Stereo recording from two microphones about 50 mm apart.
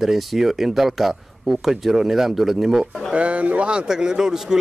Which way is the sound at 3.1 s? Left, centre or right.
Right.